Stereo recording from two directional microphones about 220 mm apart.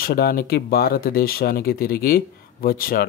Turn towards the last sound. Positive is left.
turn(degrees=40)  # may be behind; listen again after turning